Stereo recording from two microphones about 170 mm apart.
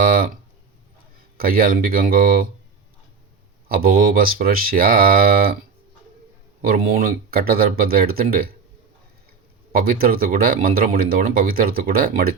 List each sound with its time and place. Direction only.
0.0 s guitar: 55° right (ahead or behind)
1.4 s speech: 60° right (ahead or behind)
3.7 s speech: 60° right (ahead or behind)
6.6 s speech: 60° right (ahead or behind)
9.7 s speech: 60° right (ahead or behind)